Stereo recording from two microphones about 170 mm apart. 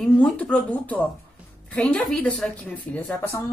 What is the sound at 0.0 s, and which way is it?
A woman's voice, 10° left (ahead or behind).